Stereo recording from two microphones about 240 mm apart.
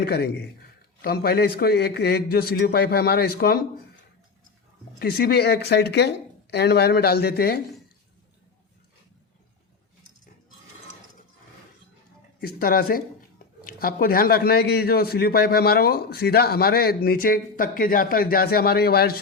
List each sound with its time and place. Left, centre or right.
0.0 s a man's voice: left
4.9 s speech: left
12.4 s a man's voice: left